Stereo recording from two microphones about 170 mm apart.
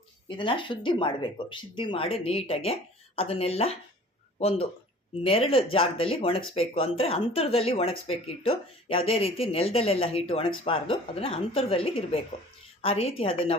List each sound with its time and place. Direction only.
0.3 s speech: 30° left (ahead or behind)